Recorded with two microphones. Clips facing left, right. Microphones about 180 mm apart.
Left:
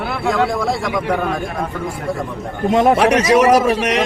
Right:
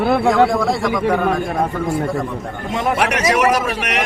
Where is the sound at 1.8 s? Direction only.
25° right (ahead or behind).